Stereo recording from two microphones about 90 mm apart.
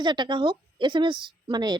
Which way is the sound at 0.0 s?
55° right (ahead or behind).